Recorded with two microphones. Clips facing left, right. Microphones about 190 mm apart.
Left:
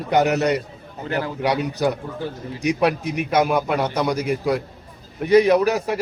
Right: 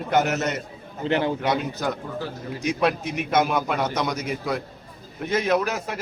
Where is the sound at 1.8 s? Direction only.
10° left (ahead or behind).